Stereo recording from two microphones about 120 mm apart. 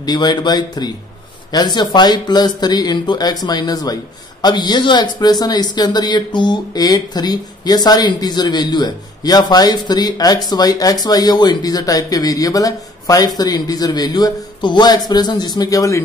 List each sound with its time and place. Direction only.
0.0 s speech: 35° left (ahead or behind)